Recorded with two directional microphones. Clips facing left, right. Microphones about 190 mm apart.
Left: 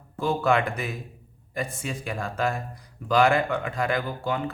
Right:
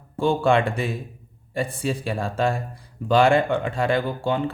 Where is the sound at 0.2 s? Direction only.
30° right (ahead or behind).